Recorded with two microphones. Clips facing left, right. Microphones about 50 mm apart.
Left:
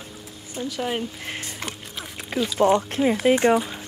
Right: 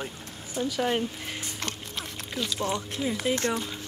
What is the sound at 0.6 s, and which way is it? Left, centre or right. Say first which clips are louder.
Speech: even; centre.